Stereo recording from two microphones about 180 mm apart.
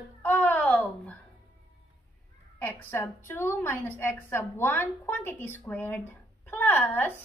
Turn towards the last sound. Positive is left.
turn(degrees=10)  # may be behind; listen again after turning